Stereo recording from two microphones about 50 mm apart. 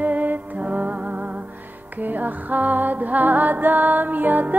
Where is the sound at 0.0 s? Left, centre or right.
Right.